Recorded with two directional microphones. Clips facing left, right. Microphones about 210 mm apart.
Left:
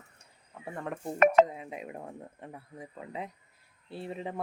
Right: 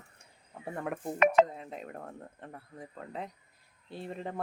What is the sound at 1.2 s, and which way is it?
Speech, 45° left (ahead or behind).